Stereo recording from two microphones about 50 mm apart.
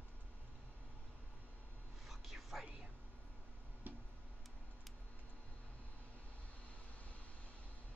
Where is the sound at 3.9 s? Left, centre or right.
Right.